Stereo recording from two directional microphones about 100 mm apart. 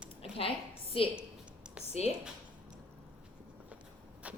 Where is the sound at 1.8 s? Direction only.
90° left.